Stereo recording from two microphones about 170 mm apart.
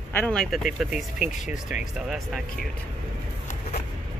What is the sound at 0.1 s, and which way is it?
Speech, 10° left (ahead or behind).